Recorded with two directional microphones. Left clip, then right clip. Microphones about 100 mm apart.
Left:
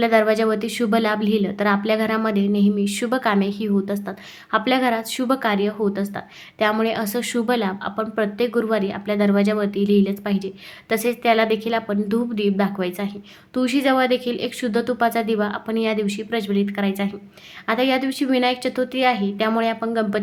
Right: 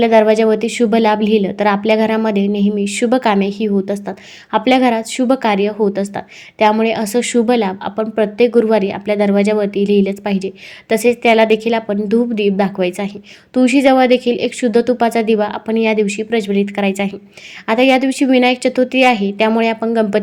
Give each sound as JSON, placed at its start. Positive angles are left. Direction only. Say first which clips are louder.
{"t": 0.0, "sound": "a woman's voice", "louder": "right 7 dB", "side_deg": -35}
{"t": 5.1, "sound": "a woman's voice", "louder": "right 7 dB", "side_deg": -30}
{"t": 5.4, "sound": "a woman's voice", "louder": "right 6 dB", "side_deg": -45}
{"t": 13.5, "sound": "a woman's voice", "louder": "right 8 dB", "side_deg": -40}